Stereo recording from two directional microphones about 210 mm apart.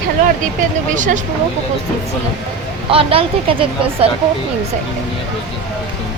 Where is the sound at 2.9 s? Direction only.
25° right (ahead or behind).